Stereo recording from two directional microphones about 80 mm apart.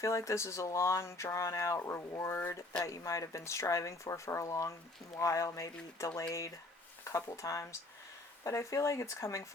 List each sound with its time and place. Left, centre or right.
0.0 s speech: left
7.0 s a sound: left
7.3 s speech: left